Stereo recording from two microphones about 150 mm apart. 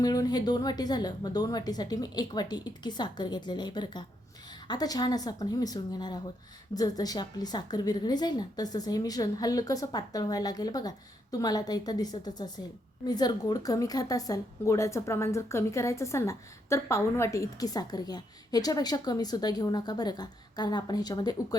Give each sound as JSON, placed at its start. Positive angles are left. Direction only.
{"t": 0.0, "sound": "a woman's voice", "side_deg": 25}